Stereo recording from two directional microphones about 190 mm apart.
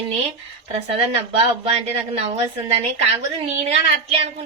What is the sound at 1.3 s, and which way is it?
A woman's voice, 35° right (ahead or behind).